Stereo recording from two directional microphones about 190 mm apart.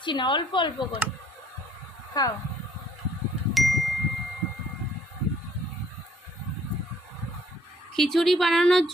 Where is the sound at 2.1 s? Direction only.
20° left (ahead or behind).